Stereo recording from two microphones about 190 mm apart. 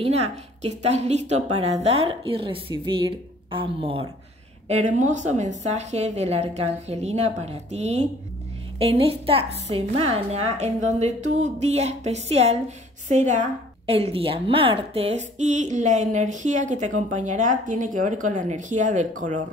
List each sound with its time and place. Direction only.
0.0 s a woman's voice: 35° right (ahead or behind)